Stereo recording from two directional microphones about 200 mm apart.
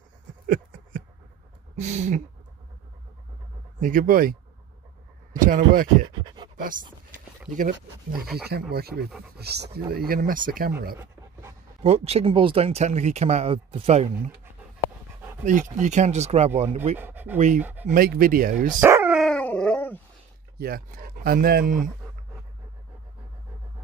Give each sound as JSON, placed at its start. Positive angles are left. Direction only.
{"t": 0.5, "sound": "a sound", "side_deg": -45}
{"t": 1.8, "sound": "speech", "side_deg": -35}
{"t": 3.8, "sound": "speech", "side_deg": -45}
{"t": 5.4, "sound": "speech", "side_deg": -45}
{"t": 6.0, "sound": "pant", "side_deg": -20}
{"t": 7.5, "sound": "speech", "side_deg": -45}
{"t": 11.8, "sound": "speech", "side_deg": -30}
{"t": 15.4, "sound": "speech", "side_deg": -40}
{"t": 17.0, "sound": "speech", "side_deg": -10}
{"t": 17.8, "sound": "speech", "side_deg": -45}
{"t": 18.7, "sound": "dog", "side_deg": -10}
{"t": 19.1, "sound": "dog", "side_deg": 5}
{"t": 20.5, "sound": "speech", "side_deg": -50}